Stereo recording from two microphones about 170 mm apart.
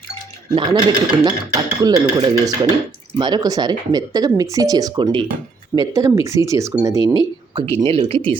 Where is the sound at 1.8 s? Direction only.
20° right (ahead or behind).